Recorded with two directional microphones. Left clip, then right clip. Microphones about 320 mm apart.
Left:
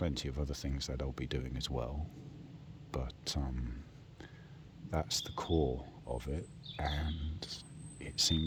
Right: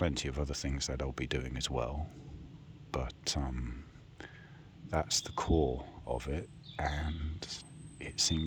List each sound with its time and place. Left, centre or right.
0.0 s speech: centre
4.9 s speech: centre